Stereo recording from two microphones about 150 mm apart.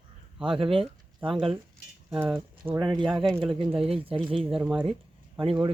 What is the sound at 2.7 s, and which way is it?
Speech, 30° right (ahead or behind).